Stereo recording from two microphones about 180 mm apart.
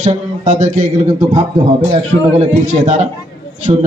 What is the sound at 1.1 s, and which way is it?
A man's voice, 25° right (ahead or behind).